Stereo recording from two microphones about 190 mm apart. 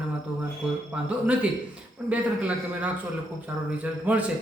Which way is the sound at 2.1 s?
5° right (ahead or behind).